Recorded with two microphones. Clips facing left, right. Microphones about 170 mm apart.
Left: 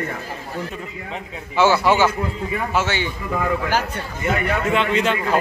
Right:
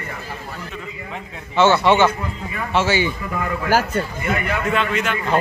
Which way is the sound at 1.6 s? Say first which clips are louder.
Right 2 dB; 10° left (ahead or behind).